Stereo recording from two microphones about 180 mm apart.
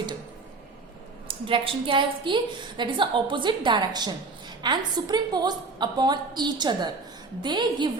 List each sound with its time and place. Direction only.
1.3 s a woman's voice: 30° right (ahead or behind)